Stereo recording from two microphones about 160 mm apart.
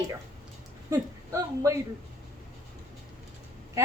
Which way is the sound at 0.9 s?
20° right (ahead or behind).